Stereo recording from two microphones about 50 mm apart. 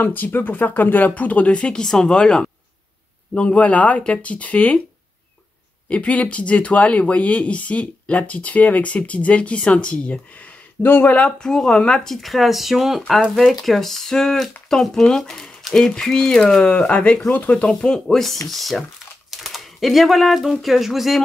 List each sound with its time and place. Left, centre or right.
0.0 s speech: left
5.9 s speech: left
10.8 s speech: left
11.1 s speech: centre
18.0 s speech: centre